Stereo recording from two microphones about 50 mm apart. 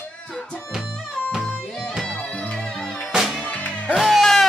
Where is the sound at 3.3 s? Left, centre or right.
Left.